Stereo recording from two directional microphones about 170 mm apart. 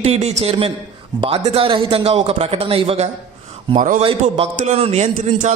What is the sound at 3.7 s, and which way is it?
Speech, 45° right (ahead or behind).